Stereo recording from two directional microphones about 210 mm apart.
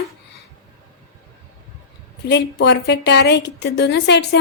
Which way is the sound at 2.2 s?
55° left (ahead or behind).